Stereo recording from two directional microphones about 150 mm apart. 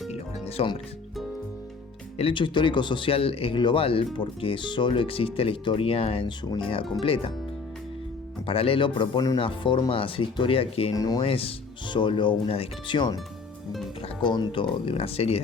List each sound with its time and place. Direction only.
0.1 s music: 45° left (ahead or behind)
2.1 s speech: 35° left (ahead or behind)
8.4 s speech: 40° left (ahead or behind)
10.9 s speech: 25° left (ahead or behind)
11.3 s speech: 40° left (ahead or behind)
14.2 s speech: 30° left (ahead or behind)